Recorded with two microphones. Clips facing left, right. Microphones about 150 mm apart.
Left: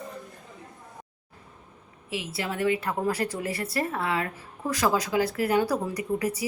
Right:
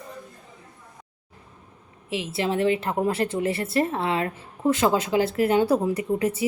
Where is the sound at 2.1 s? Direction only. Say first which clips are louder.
Right 6 dB; 25° right (ahead or behind).